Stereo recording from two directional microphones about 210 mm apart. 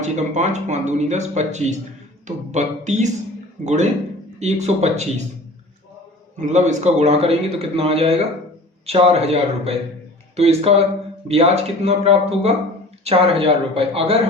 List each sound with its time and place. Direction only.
0.0 s speech: 35° right (ahead or behind)
6.4 s speech: 35° right (ahead or behind)